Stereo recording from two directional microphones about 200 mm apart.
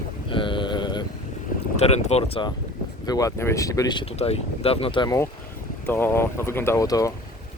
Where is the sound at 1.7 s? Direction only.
35° left (ahead or behind).